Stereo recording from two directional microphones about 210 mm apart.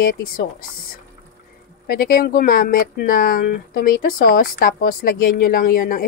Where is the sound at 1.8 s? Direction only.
45° left (ahead or behind).